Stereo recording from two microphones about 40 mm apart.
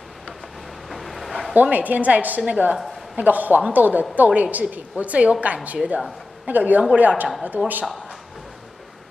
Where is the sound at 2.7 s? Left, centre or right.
Centre.